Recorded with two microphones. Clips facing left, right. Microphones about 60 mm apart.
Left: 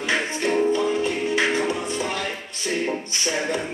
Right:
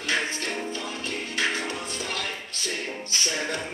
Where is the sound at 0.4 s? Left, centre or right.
Left.